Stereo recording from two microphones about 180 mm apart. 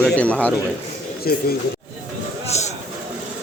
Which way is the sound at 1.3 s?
60° left (ahead or behind).